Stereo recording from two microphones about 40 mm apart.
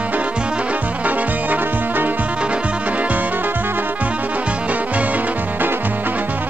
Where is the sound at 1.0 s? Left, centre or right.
Right.